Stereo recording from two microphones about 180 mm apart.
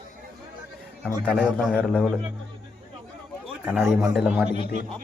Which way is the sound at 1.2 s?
5° left (ahead or behind).